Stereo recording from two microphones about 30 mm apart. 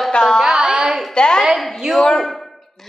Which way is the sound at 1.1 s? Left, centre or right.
Left.